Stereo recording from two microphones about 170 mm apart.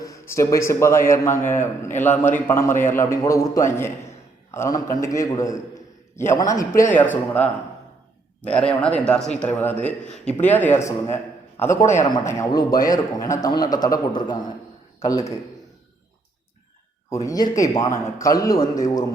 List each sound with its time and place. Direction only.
0.0 s a man's voice: 20° left (ahead or behind)
17.1 s a man's voice: 20° left (ahead or behind)